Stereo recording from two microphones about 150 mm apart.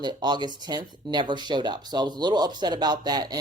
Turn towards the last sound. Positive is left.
turn(degrees=-25)  # may be behind; listen again after turning